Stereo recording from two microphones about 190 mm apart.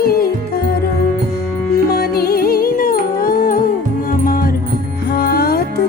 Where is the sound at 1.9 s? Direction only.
55° left (ahead or behind).